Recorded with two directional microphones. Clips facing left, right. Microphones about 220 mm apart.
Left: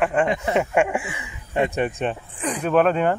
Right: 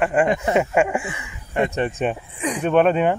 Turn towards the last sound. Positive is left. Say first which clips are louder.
# right 2 dB
turn(degrees=-5)  # may be behind; listen again after turning